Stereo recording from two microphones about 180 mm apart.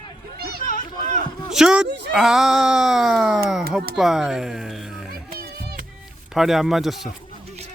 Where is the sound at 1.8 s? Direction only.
70° right (ahead or behind).